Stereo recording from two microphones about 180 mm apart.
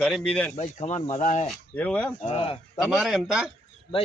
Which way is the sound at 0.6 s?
40° left (ahead or behind).